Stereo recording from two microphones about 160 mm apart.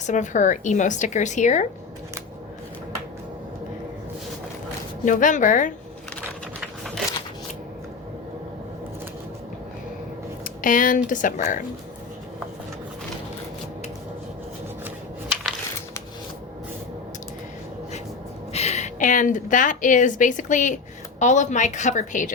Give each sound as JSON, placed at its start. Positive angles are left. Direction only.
{"t": 0.0, "sound": "a woman's voice", "side_deg": 50}
{"t": 5.0, "sound": "a woman's voice", "side_deg": 55}
{"t": 6.6, "sound": "a sound", "side_deg": 0}
{"t": 10.4, "sound": "speech", "side_deg": 55}
{"t": 18.5, "sound": "a woman's voice", "side_deg": 40}